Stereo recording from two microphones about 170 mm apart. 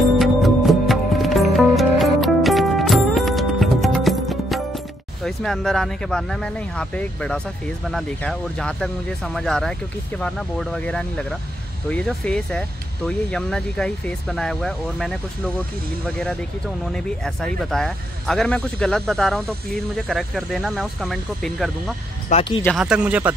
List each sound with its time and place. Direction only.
0.2 s music: centre (ahead or behind)
7.9 s speech: 5° left (ahead or behind)
22.3 s speech: 30° left (ahead or behind)
22.8 s speech: 5° right (ahead or behind)